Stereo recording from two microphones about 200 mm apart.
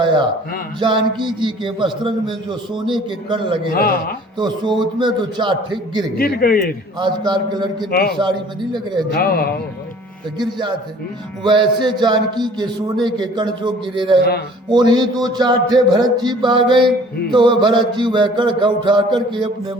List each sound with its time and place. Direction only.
0.8 s a man's voice: 25° right (ahead or behind)
3.7 s a man's voice: 45° left (ahead or behind)
4.4 s a man's voice: 20° right (ahead or behind)
6.1 s a man's voice: 50° left (ahead or behind)
7.0 s a man's voice: 20° right (ahead or behind)
7.9 s a man's voice: 50° left (ahead or behind)
8.2 s a man's voice: 20° right (ahead or behind)
9.1 s a man's voice: 50° left (ahead or behind)
10.3 s a man's voice: 20° right (ahead or behind)